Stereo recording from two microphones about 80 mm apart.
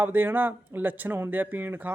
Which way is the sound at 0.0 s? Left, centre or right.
Right.